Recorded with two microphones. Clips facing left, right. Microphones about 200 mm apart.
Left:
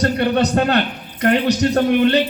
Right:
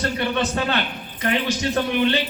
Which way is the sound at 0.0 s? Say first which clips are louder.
Left 6 dB; 45° left (ahead or behind).